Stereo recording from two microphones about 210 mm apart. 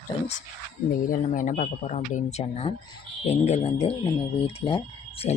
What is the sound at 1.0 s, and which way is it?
Speech, 40° left (ahead or behind).